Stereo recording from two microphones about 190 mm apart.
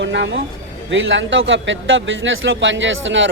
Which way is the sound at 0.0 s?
70° right (ahead or behind).